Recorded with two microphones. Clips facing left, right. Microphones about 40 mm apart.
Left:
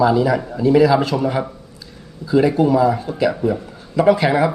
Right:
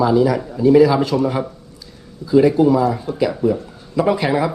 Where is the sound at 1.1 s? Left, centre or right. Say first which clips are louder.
Right 2 dB; centre.